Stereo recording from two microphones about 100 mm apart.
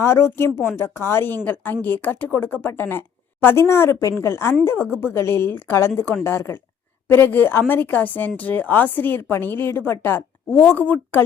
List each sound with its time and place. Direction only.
0.0 s a woman's voice: 25° left (ahead or behind)